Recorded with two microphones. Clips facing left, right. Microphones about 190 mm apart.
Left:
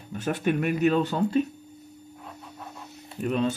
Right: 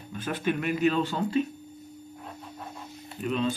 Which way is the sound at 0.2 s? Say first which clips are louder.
Left 3 dB; 45° left (ahead or behind).